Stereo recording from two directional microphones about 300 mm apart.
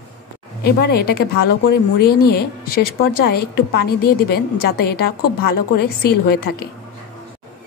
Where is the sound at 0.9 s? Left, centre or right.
Left.